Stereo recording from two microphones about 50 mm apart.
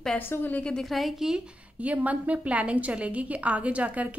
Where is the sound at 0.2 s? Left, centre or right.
Left.